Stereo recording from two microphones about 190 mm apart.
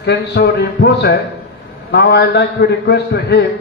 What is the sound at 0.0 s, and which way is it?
A man's voice, 60° left (ahead or behind).